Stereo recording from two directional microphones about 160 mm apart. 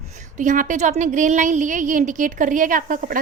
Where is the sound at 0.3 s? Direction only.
55° right (ahead or behind).